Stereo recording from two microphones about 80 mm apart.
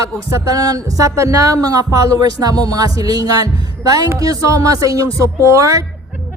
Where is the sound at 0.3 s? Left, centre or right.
Right.